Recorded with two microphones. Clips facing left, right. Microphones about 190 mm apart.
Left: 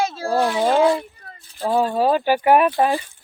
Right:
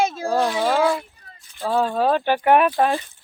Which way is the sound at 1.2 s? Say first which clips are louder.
Left 6 dB; 60° left (ahead or behind).